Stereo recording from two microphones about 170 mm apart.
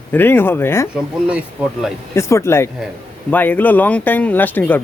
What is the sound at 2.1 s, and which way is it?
Speech, 15° left (ahead or behind).